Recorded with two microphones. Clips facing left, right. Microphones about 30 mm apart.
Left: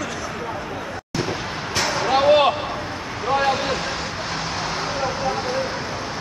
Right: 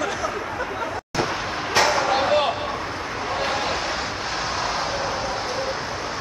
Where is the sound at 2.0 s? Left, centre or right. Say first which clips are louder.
Left 3 dB; centre.